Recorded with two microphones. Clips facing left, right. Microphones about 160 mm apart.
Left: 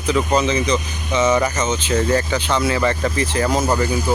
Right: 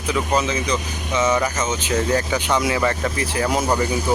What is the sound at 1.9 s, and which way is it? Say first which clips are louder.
Speech: left 2 dB; centre (ahead or behind).